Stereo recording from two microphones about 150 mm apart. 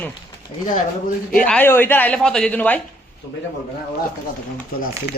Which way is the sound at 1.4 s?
10° left (ahead or behind).